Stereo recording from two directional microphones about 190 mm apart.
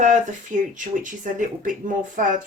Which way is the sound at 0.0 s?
40° right (ahead or behind).